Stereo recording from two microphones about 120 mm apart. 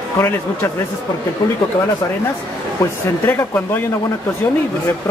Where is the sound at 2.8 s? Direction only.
20° left (ahead or behind).